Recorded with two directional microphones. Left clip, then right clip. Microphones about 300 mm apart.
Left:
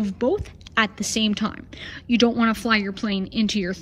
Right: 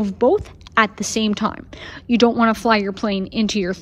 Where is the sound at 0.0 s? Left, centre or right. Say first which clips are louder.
Right 7 dB; centre.